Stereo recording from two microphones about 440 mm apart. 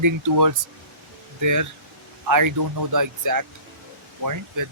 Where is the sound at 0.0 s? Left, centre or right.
Right.